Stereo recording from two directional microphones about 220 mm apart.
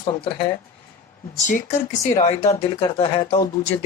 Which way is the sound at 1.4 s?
35° left (ahead or behind).